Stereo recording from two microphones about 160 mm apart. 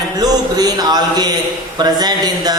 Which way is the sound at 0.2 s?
25° right (ahead or behind).